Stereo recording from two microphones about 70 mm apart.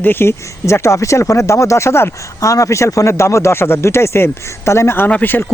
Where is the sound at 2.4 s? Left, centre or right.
Left.